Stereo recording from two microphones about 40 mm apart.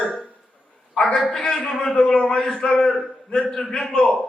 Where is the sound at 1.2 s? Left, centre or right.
Centre.